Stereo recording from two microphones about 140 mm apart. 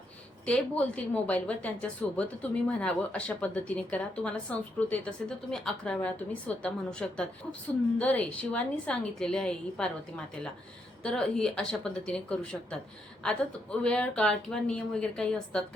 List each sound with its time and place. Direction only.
0.4 s a woman's voice: 10° left (ahead or behind)
11.0 s a woman's voice: 5° left (ahead or behind)